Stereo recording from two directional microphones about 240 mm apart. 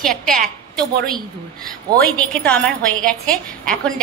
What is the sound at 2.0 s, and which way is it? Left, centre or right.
A woman's voice, centre.